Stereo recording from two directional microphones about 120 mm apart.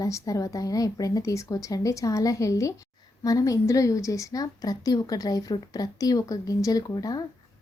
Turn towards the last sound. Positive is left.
turn(degrees=30)  # may be behind; listen again after turning